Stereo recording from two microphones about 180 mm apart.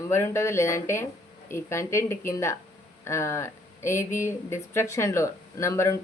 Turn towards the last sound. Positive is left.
turn(degrees=15)  # may be behind; listen again after turning